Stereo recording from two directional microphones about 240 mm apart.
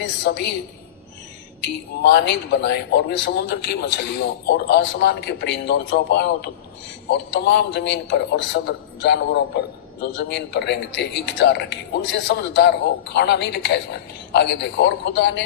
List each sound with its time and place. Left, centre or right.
0.0 s speech: left
1.6 s speech: left